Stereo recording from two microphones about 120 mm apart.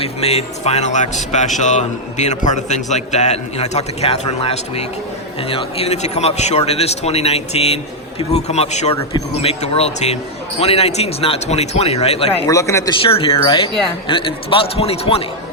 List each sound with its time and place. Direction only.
0.0 s a man's voice: 60° left (ahead or behind)
12.5 s a man's voice: 25° left (ahead or behind)
12.9 s a man's voice: 50° left (ahead or behind)